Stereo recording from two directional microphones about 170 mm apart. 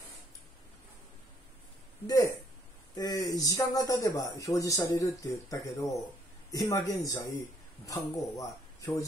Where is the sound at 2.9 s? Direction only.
25° left (ahead or behind).